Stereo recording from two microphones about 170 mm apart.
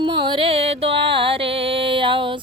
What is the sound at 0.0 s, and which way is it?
Music, 30° right (ahead or behind).